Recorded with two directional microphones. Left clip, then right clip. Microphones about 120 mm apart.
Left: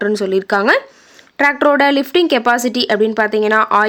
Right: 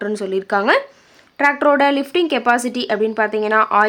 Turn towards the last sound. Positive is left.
turn(degrees=40)  # may be behind; listen again after turning